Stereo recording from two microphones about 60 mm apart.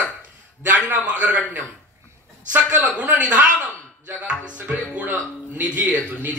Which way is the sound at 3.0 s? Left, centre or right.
Right.